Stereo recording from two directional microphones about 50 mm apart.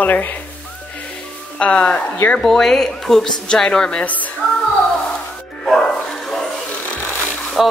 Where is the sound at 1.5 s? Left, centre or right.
Left.